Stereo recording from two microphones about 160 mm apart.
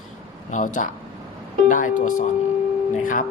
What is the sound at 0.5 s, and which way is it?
Speech, 50° left (ahead or behind).